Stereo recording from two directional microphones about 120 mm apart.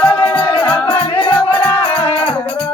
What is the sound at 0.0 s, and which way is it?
Music, 10° left (ahead or behind).